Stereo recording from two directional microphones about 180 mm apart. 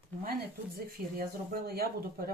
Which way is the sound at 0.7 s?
55° right (ahead or behind).